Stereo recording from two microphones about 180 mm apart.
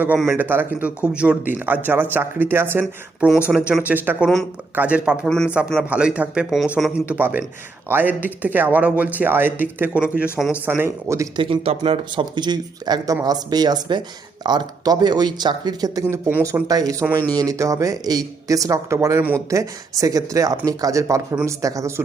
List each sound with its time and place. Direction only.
0.0 s a man's voice: 5° right (ahead or behind)
11.4 s a man's voice: 30° right (ahead or behind)